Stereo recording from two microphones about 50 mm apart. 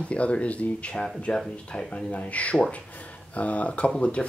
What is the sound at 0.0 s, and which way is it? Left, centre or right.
Speech, left.